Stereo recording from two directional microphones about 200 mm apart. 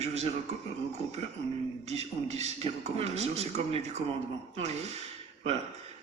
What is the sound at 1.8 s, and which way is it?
A man's voice, 35° right (ahead or behind).